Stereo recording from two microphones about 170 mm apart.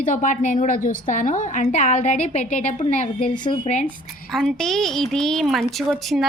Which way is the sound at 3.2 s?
25° left (ahead or behind).